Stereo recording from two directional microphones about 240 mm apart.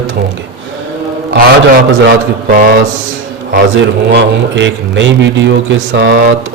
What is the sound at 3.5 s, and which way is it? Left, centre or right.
A man's voice, right.